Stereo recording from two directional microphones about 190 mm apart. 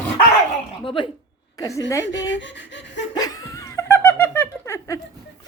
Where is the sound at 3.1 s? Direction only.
20° left (ahead or behind).